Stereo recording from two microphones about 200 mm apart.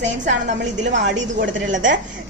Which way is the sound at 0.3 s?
65° right (ahead or behind).